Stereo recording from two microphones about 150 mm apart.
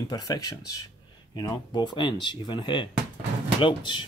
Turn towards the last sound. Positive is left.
turn(degrees=30)  # may be behind; listen again after turning